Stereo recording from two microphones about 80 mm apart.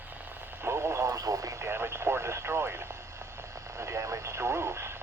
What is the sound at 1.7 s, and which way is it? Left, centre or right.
Speech, right.